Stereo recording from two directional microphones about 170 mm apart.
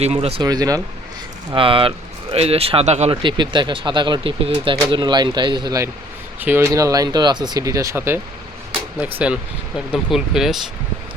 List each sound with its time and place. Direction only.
0.0 s speech: 35° right (ahead or behind)
0.4 s speech: 20° right (ahead or behind); by 10.6 s centre (ahead or behind)